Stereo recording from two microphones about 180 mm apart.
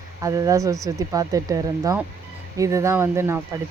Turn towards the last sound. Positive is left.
turn(degrees=-15)  # may be behind; listen again after turning